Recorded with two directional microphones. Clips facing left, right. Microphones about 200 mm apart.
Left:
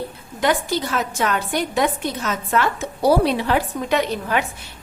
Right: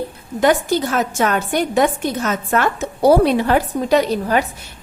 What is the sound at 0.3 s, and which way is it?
A woman's voice, 45° right (ahead or behind).